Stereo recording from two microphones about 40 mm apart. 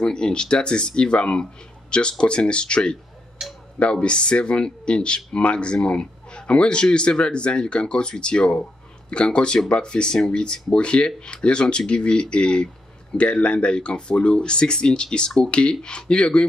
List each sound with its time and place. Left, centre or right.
0.0 s speech: left
3.4 s speech: centre
3.8 s speech: left